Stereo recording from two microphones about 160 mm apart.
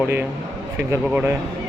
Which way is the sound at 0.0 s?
10° right (ahead or behind).